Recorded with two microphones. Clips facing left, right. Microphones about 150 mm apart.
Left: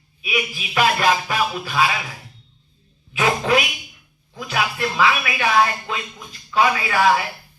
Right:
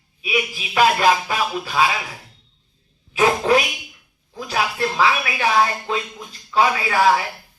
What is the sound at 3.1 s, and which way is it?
A man's voice, 35° right (ahead or behind).